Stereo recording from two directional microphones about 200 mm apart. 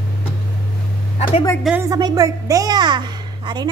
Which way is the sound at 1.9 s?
20° right (ahead or behind).